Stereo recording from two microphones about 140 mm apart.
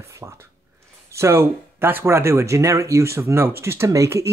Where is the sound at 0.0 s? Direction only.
20° right (ahead or behind).